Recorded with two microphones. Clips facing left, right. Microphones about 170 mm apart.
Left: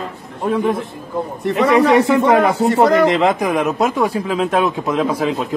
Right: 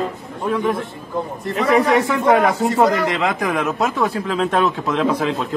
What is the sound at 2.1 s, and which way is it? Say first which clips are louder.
Speech: left 2 dB; 25° left (ahead or behind).